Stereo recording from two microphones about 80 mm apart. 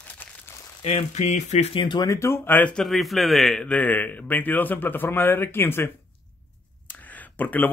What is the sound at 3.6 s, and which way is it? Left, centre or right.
Speech, centre.